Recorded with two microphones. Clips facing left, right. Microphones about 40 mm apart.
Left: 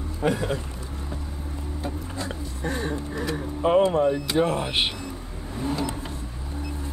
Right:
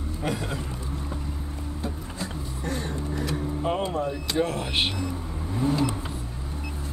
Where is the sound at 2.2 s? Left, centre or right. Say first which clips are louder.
Even; centre.